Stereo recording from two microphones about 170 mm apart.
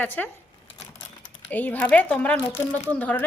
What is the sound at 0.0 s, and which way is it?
Speech, 10° left (ahead or behind).